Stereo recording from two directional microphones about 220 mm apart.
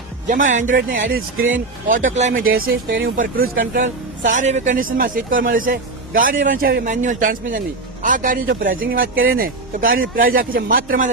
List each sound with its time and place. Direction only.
0.3 s a man's voice: 35° right (ahead or behind)
1.4 s speech: 60° right (ahead or behind)
1.9 s a man's voice: 35° right (ahead or behind)
9.1 s speech: 65° right (ahead or behind)
9.4 s a man's voice: 40° right (ahead or behind)